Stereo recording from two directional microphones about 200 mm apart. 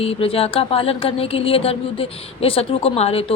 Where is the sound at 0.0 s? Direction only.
30° left (ahead or behind).